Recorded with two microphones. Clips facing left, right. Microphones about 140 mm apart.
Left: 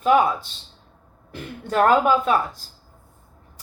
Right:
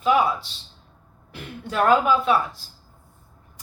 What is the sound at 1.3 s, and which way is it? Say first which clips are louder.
A woman's voice: left 5 dB; 50° left (ahead or behind).